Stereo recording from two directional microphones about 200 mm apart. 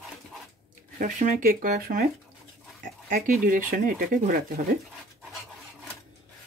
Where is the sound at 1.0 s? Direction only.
40° right (ahead or behind).